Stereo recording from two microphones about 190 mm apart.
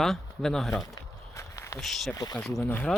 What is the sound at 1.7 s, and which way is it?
Speech, centre (ahead or behind).